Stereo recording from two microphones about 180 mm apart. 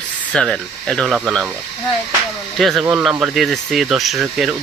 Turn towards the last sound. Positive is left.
turn(degrees=0)  # may be behind; listen again after turning